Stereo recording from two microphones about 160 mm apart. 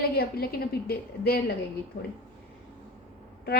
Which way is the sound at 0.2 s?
75° left (ahead or behind).